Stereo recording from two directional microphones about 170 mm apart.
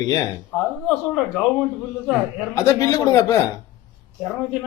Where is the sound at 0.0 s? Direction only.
20° left (ahead or behind).